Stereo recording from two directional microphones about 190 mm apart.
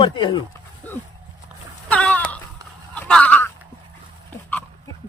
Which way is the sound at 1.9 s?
5° left (ahead or behind).